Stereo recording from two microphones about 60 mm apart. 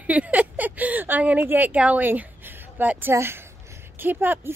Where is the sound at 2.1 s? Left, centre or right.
Right.